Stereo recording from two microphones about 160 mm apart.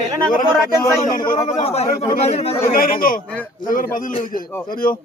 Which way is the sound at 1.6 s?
40° left (ahead or behind).